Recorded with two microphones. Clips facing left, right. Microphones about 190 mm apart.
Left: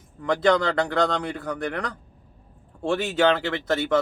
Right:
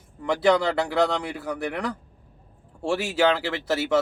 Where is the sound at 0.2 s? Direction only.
5° right (ahead or behind).